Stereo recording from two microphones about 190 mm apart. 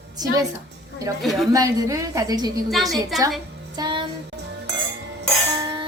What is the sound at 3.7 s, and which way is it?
Music, 25° right (ahead or behind).